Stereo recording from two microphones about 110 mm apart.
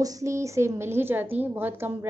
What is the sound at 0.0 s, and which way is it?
A woman's voice, 30° right (ahead or behind).